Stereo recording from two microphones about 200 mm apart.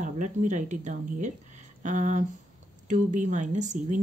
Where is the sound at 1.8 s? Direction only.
40° right (ahead or behind).